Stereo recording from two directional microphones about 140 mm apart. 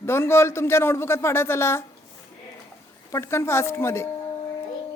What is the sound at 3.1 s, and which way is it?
Speech, 20° left (ahead or behind).